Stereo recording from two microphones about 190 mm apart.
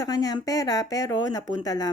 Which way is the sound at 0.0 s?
20° left (ahead or behind).